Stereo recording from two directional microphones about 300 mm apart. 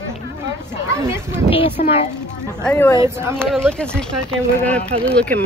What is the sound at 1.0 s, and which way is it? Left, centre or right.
Speech, centre.